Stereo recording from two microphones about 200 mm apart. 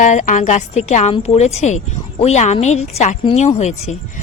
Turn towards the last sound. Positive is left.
turn(degrees=35)  # may be behind; listen again after turning